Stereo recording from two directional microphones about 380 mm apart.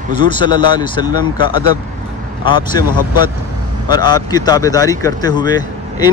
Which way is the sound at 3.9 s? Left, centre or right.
Centre.